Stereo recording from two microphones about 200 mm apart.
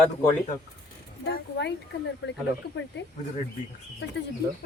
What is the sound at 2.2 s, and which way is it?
Speech, 60° left (ahead or behind).